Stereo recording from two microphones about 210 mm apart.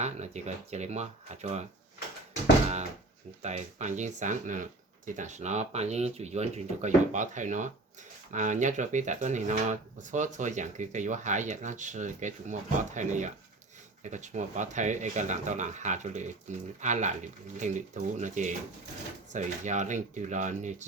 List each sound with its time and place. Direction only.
0.0 s speech: 35° right (ahead or behind)
3.4 s speech: 35° right (ahead or behind)